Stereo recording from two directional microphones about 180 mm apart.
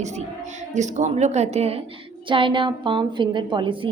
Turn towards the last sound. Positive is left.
turn(degrees=-30)  # may be behind; listen again after turning